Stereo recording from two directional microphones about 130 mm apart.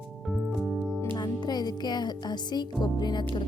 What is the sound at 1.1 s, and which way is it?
Speech, 35° left (ahead or behind).